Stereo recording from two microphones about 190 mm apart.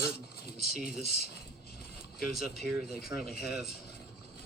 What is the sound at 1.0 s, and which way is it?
Speech, 55° left (ahead or behind).